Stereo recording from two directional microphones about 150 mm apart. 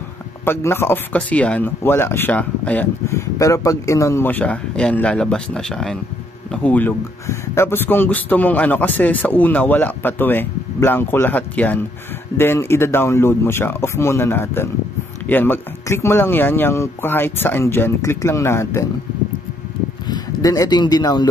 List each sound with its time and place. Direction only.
0.5 s a man's voice: 15° left (ahead or behind)
20.1 s speech: 25° left (ahead or behind)